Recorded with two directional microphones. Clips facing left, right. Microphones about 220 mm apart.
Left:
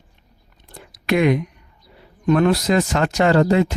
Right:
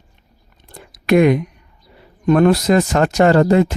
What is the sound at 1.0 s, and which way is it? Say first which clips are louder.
Speech: right 5 dB; 45° right (ahead or behind).